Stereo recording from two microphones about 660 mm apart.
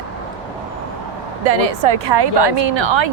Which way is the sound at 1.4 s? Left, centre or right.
Right.